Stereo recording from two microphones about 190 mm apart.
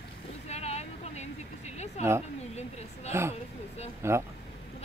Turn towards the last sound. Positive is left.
turn(degrees=-15)  # may be behind; listen again after turning